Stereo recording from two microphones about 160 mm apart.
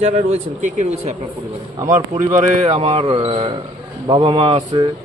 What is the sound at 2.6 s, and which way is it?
Speech, 40° right (ahead or behind).